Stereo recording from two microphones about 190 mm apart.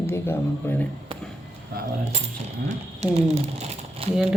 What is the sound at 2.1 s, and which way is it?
Speech, 35° right (ahead or behind).